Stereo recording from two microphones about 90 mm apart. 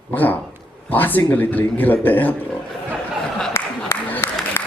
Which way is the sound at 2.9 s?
5° left (ahead or behind).